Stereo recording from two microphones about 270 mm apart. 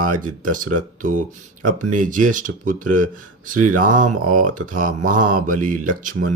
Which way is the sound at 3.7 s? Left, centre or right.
Right.